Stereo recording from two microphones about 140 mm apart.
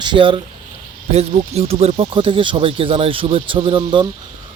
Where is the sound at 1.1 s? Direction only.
50° right (ahead or behind).